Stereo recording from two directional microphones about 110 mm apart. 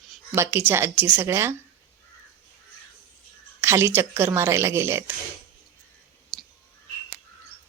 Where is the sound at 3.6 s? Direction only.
25° right (ahead or behind).